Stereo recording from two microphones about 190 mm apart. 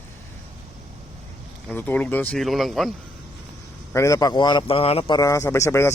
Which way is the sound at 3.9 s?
15° left (ahead or behind).